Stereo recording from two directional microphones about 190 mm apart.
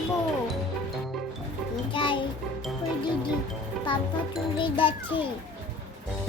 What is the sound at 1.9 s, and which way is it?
Music, 25° left (ahead or behind).